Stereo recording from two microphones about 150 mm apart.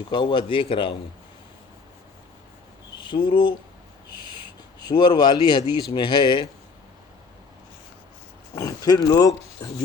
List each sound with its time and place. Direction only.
0.1 s speech: 30° left (ahead or behind)
3.0 s speech: 30° left (ahead or behind)
8.5 s speech: 25° left (ahead or behind)